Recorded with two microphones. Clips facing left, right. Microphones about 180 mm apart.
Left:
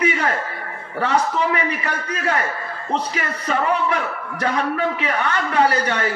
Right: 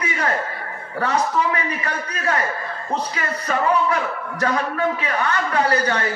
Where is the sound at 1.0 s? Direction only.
25° left (ahead or behind).